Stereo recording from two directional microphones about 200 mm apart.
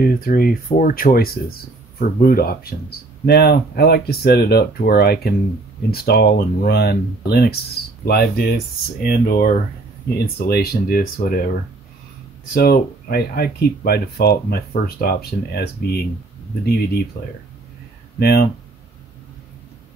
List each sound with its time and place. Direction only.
0.0 s speech: 45° left (ahead or behind)
12.5 s speech: 50° left (ahead or behind)
17.1 s speech: 50° left (ahead or behind)